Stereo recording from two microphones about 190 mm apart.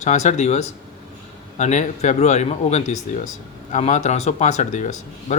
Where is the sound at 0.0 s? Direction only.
40° left (ahead or behind).